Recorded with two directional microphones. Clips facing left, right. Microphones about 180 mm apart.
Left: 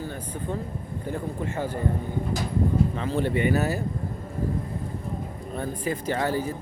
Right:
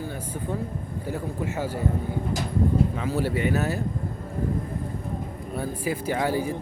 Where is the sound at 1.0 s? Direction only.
10° right (ahead or behind).